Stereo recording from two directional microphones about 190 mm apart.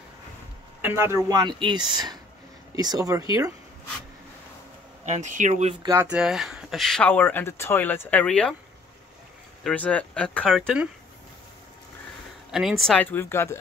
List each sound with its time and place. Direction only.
0.8 s speech: 15° right (ahead or behind)
5.0 s speech: 40° right (ahead or behind)
5.8 s speech: 15° right (ahead or behind)
6.0 s speech: 5° right (ahead or behind)
9.6 s speech: 5° left (ahead or behind)
12.4 s speech: 5° right (ahead or behind); by 13.6 s 15° left (ahead or behind)